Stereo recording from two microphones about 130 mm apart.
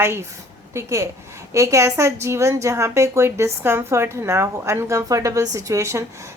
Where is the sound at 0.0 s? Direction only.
20° right (ahead or behind).